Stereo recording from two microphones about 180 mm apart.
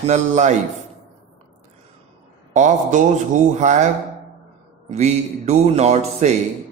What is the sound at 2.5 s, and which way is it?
A man's voice, 40° right (ahead or behind).